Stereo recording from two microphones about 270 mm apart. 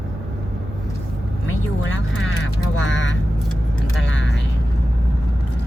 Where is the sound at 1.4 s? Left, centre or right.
Left.